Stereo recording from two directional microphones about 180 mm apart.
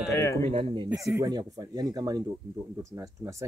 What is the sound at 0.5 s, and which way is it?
Speech, 30° right (ahead or behind).